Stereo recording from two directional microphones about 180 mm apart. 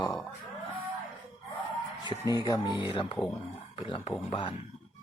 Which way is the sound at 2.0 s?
25° left (ahead or behind).